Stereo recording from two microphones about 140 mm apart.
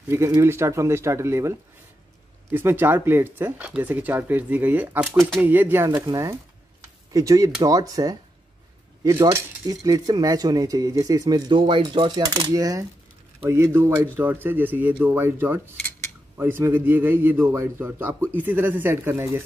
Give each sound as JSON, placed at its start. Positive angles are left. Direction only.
{"t": 0.1, "sound": "a man's voice", "side_deg": -20}